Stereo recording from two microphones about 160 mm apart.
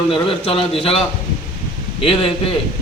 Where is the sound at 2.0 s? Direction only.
35° left (ahead or behind).